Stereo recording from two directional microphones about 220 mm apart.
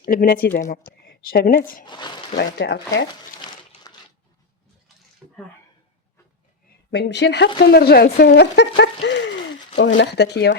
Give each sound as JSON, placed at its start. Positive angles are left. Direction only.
{"t": 0.0, "sound": "speech", "side_deg": 40}
{"t": 1.8, "sound": "speech", "side_deg": 20}
{"t": 2.4, "sound": "speech", "side_deg": 50}
{"t": 3.9, "sound": "crushing", "side_deg": 15}
{"t": 6.9, "sound": "speech", "side_deg": 50}